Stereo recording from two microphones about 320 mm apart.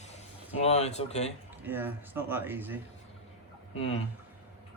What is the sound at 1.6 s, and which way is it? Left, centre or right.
Speech, centre.